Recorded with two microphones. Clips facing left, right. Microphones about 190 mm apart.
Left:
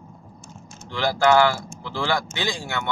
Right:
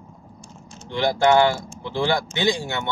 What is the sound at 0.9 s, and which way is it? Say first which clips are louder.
Speech: right 1 dB; 20° right (ahead or behind).